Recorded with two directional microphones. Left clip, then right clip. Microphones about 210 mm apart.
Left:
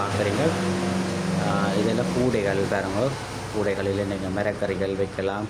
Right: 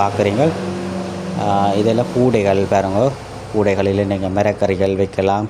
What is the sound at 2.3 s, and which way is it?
A man's voice, 30° right (ahead or behind).